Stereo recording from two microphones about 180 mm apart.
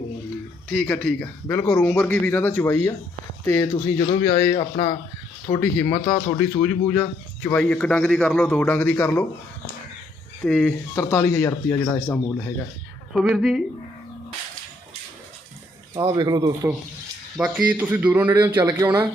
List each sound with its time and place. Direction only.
0.7 s speech: 5° left (ahead or behind)
4.5 s speech: 30° left (ahead or behind)
5.5 s speech: 10° left (ahead or behind)
6.1 s speech: 20° left (ahead or behind)
6.6 s speech: 5° left (ahead or behind)
10.4 s speech: 10° left (ahead or behind)
13.1 s speech: centre (ahead or behind)
16.0 s a man's voice: 20° right (ahead or behind)
17.3 s speech: 5° right (ahead or behind)